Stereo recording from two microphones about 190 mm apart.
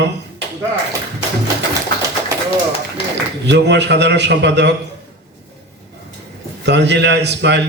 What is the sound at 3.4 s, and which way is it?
A man's voice, 65° right (ahead or behind).